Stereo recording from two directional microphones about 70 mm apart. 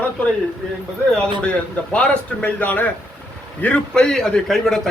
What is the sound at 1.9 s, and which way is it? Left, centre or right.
A man's voice, centre.